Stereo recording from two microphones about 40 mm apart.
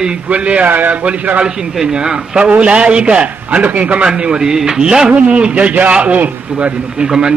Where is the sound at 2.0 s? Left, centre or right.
Right.